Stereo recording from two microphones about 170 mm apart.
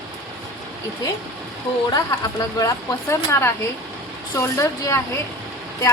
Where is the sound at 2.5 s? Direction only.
20° left (ahead or behind).